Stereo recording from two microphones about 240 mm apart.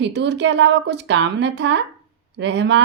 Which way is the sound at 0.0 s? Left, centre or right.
Right.